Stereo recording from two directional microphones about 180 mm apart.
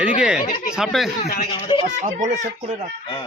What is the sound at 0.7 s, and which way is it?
Speech, 5° right (ahead or behind).